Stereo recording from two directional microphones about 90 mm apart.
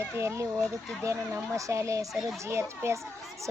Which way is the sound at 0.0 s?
30° right (ahead or behind).